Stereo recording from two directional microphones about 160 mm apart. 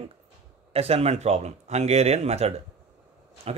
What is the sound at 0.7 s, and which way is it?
Speech, 40° right (ahead or behind).